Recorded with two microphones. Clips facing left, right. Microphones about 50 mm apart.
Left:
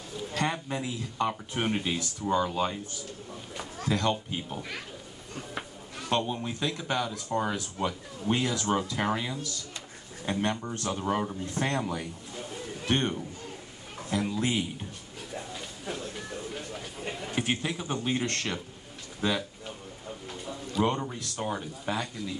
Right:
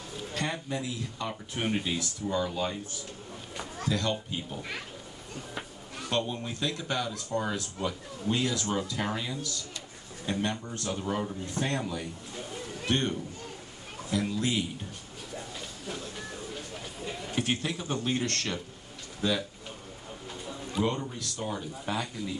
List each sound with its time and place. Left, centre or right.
0.4 s speech: left
1.6 s speech: centre
3.9 s speech: left
6.0 s a man's voice: centre
10.4 s speech: left
12.8 s speech: left
14.3 s speech: left
17.4 s a man's voice: centre
20.8 s speech: left
21.9 s a man's voice: centre